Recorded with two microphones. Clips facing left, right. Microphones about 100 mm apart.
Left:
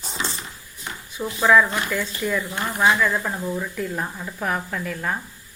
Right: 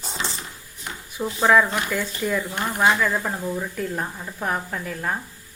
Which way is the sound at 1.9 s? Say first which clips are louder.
Even; 45° right (ahead or behind).